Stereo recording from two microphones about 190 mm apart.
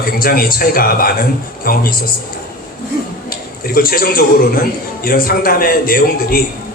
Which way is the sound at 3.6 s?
50° left (ahead or behind).